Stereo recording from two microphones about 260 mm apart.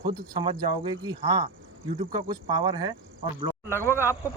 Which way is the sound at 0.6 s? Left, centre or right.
Centre.